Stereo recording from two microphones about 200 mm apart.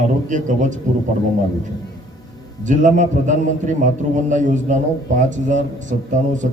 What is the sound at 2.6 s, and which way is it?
A man's voice, 40° right (ahead or behind).